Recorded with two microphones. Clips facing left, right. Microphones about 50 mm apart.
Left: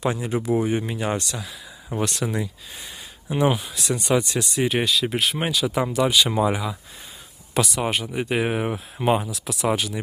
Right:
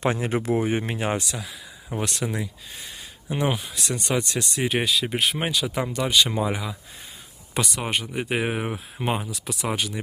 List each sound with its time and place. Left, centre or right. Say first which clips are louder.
0.0 s speech: even; right
0.5 s speech: left 4 dB; right
1.3 s speech: left 1 dB; centre